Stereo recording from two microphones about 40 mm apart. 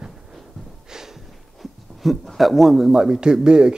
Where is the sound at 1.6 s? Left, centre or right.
Centre; by 3.7 s right.